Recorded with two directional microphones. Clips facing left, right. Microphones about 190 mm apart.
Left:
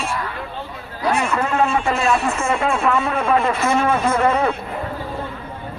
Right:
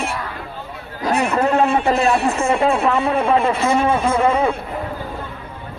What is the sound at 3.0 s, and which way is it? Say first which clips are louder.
A man's voice: right 2 dB; 15° right (ahead or behind).